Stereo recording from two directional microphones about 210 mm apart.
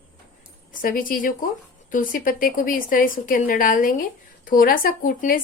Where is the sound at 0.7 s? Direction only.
40° left (ahead or behind).